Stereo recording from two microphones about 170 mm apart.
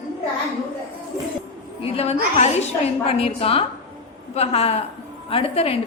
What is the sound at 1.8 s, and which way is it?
A woman's voice, 35° left (ahead or behind).